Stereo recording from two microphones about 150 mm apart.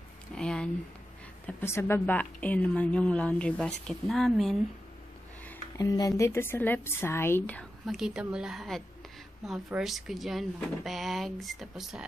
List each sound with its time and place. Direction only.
0.3 s a sound: 5° left (ahead or behind)
1.4 s a woman's voice: 15° left (ahead or behind)
5.8 s a woman's voice: 25° left (ahead or behind)
7.8 s speech: centre (ahead or behind)